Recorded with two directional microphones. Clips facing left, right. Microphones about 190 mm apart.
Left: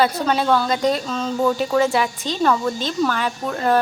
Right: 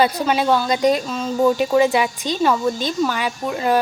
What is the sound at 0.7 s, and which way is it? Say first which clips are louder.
Speech: right 2 dB; 15° right (ahead or behind).